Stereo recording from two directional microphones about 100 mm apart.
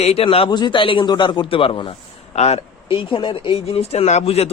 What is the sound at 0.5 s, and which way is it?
A man's voice, 50° left (ahead or behind).